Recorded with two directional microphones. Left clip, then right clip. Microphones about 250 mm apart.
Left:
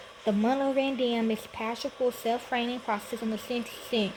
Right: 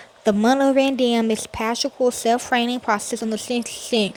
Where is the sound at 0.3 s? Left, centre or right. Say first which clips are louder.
Right 10 dB; right.